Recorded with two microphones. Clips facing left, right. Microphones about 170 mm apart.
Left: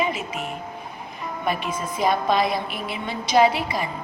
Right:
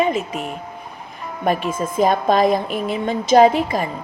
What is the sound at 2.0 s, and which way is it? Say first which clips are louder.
A woman's voice: right 5 dB; 45° right (ahead or behind).